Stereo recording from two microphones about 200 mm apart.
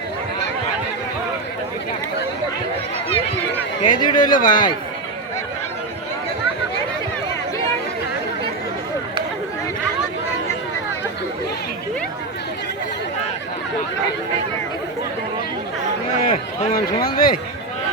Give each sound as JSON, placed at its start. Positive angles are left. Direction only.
{"t": 3.8, "sound": "speech", "side_deg": 25}
{"t": 4.2, "sound": "a man's voice", "side_deg": 40}
{"t": 16.3, "sound": "a man's voice", "side_deg": 45}